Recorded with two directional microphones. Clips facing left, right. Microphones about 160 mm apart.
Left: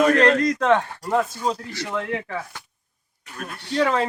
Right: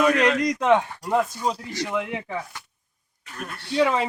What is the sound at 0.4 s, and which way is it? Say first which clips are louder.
Speech: even; 10° right (ahead or behind).